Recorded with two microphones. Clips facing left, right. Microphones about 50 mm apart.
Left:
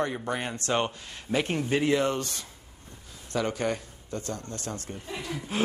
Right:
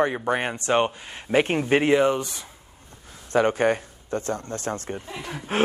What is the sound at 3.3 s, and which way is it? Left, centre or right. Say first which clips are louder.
Speech: right 8 dB; right.